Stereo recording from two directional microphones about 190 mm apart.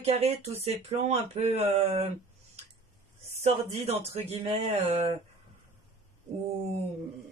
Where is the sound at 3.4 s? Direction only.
35° right (ahead or behind).